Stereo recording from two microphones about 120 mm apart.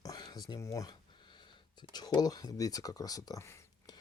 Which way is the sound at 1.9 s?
35° left (ahead or behind).